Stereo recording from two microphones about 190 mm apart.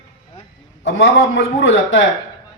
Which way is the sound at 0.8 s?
80° left.